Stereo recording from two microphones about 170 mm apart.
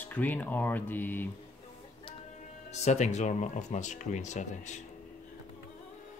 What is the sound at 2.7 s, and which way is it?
Speech, 40° left (ahead or behind).